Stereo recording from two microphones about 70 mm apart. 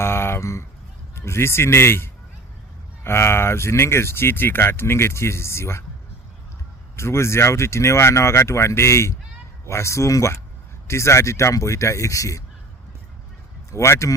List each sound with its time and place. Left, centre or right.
0.0 s a sound: left
1.1 s speech: left
6.9 s speech: left
13.7 s speech: left